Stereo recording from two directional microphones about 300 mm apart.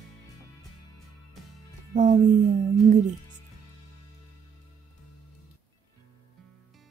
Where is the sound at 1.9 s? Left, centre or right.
Right.